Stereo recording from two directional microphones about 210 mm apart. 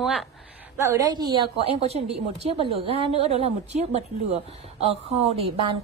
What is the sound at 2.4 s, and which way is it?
A woman's voice, 30° right (ahead or behind).